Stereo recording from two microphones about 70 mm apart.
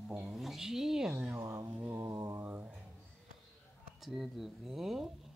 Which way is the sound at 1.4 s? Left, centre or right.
Right.